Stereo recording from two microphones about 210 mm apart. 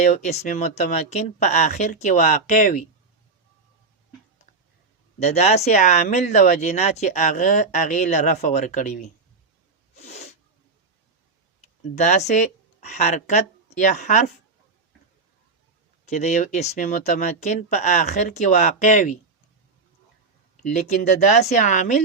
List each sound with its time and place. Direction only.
0.0 s speech: 35° left (ahead or behind)
5.2 s speech: 30° left (ahead or behind)
9.9 s sneeze: 30° left (ahead or behind)
11.6 s speech: 35° left (ahead or behind)
16.0 s speech: 35° left (ahead or behind)
20.6 s speech: 35° left (ahead or behind)